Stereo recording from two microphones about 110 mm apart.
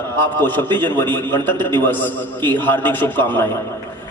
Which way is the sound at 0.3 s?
20° left (ahead or behind).